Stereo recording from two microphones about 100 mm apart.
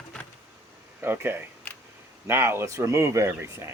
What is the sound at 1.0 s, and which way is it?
Speech, 20° right (ahead or behind).